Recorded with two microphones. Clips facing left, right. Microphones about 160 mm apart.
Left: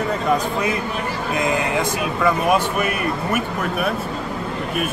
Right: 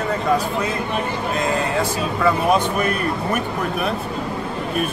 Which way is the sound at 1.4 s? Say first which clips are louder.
Left 1 dB; 20° left (ahead or behind).